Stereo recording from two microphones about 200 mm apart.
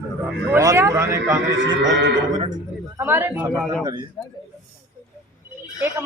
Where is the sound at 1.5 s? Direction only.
65° right (ahead or behind).